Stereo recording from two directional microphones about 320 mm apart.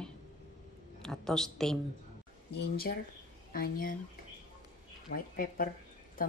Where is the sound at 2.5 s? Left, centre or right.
Left.